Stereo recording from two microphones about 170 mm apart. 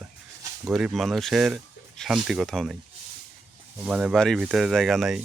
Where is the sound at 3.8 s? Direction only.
5° right (ahead or behind).